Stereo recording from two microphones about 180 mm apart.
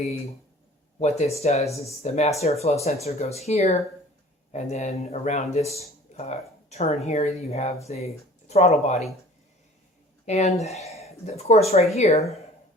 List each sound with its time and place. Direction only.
0.9 s speech: 40° left (ahead or behind)
10.2 s speech: 40° left (ahead or behind)